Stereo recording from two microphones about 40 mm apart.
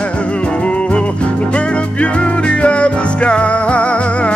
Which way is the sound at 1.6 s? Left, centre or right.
Left.